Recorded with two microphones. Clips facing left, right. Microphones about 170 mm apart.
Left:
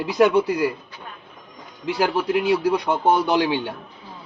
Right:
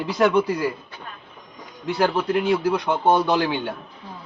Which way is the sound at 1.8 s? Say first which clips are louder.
Even; 10° left (ahead or behind).